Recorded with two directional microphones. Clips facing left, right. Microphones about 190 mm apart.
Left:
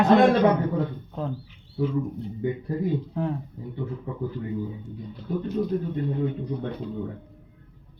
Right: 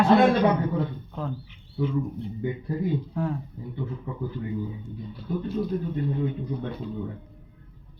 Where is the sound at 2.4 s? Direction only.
40° left (ahead or behind).